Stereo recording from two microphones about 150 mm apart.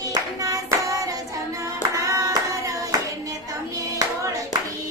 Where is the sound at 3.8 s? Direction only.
20° right (ahead or behind).